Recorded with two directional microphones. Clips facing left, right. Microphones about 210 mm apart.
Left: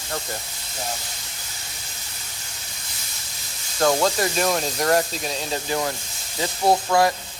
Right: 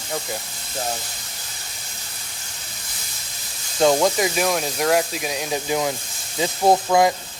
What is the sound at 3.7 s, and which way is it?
Speech, 20° right (ahead or behind).